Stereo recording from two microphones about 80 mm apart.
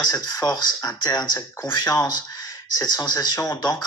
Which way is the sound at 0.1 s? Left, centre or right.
Left.